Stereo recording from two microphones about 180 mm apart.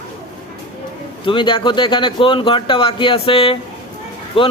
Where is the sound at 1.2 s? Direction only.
30° left (ahead or behind).